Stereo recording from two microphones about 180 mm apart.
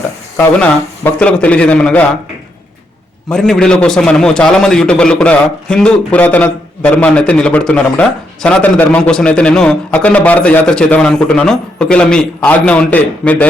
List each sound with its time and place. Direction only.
0.3 s a man's voice: 5° left (ahead or behind)
3.2 s a man's voice: centre (ahead or behind)